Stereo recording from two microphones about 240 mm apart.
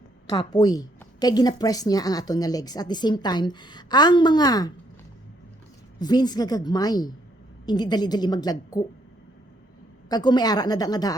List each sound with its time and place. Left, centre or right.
0.3 s a woman's voice: centre
6.0 s a woman's voice: centre
10.1 s a woman's voice: centre